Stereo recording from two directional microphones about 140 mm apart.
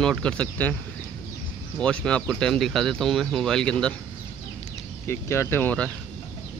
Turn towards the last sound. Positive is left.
turn(degrees=10)  # may be behind; listen again after turning